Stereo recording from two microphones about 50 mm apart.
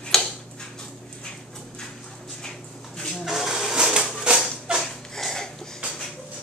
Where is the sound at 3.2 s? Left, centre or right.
Centre.